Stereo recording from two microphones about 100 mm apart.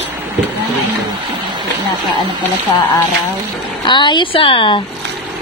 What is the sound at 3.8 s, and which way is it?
Speech, 50° left (ahead or behind).